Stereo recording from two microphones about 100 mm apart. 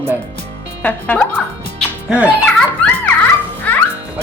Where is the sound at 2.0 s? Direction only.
15° right (ahead or behind).